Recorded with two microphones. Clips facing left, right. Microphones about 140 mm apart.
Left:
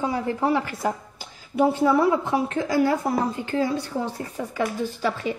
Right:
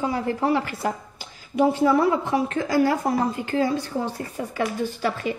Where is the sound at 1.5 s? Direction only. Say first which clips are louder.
Even; 10° left (ahead or behind).